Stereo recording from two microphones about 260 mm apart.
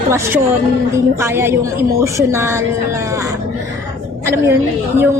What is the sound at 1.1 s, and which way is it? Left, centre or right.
A woman's voice, centre.